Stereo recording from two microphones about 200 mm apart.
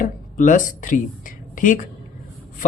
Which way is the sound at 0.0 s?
40° left (ahead or behind).